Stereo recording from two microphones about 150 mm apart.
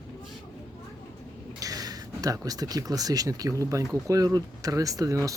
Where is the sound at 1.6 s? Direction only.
25° right (ahead or behind).